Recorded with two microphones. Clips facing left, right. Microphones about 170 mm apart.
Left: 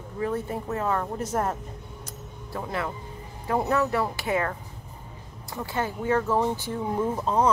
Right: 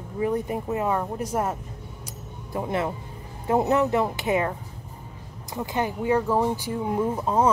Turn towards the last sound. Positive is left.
turn(degrees=-10)  # may be behind; listen again after turning